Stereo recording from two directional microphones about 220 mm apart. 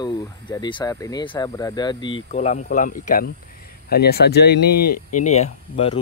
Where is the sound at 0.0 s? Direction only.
20° left (ahead or behind).